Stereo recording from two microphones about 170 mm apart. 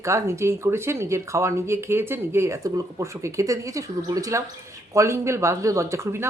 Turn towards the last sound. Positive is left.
turn(degrees=-15)  # may be behind; listen again after turning